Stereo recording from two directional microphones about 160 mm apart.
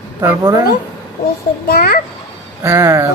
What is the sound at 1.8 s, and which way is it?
Speech, 75° left (ahead or behind).